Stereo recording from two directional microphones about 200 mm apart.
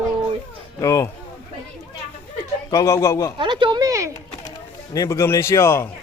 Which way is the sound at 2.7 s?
15° left (ahead or behind).